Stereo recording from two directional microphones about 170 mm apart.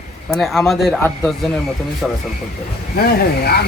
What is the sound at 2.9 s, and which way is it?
Speech, 65° left (ahead or behind).